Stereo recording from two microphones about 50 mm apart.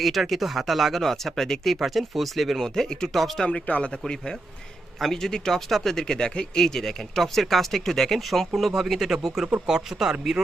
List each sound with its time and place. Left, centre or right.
0.0 s speech: centre
3.4 s speech: left
4.9 s speech: centre